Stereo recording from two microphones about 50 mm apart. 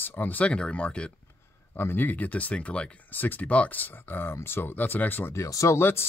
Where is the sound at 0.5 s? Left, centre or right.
Left.